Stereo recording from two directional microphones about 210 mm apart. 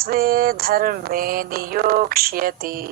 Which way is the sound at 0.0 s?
45° right (ahead or behind).